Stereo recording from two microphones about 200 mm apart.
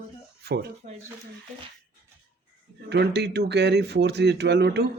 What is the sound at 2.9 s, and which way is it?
Speech, 55° right (ahead or behind).